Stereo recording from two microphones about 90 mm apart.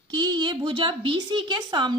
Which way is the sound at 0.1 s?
55° right (ahead or behind).